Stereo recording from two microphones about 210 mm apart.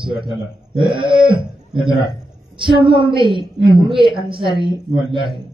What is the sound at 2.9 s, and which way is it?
Speech, 25° right (ahead or behind).